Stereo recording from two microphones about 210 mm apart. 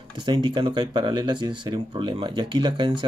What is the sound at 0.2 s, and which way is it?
Speech, 20° right (ahead or behind).